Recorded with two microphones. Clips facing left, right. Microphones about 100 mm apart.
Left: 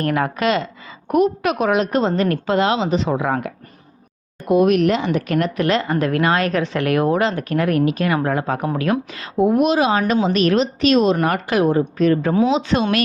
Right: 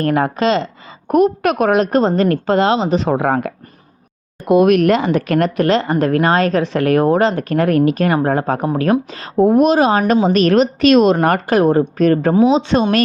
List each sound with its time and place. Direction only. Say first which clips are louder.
0.0 s speech: right 4 dB; 35° right (ahead or behind)
1.0 s a woman's voice: right 4 dB; 45° right (ahead or behind)
4.4 s a woman's voice: right 4 dB; 70° right (ahead or behind); by 5.7 s 45° right (ahead or behind)
5.7 s a woman's voice: right 4 dB; 30° right (ahead or behind); by 12.3 s 50° right (ahead or behind)
12.5 s speech: right 4 dB; 35° right (ahead or behind)